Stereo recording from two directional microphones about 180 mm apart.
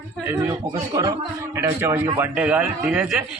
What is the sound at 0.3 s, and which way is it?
A man's voice, 20° right (ahead or behind).